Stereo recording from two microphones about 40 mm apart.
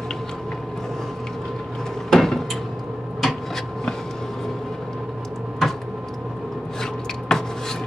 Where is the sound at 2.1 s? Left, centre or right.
Centre.